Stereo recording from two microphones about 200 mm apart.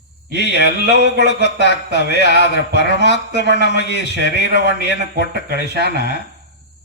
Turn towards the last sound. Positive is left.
turn(degrees=55)  # may be behind; listen again after turning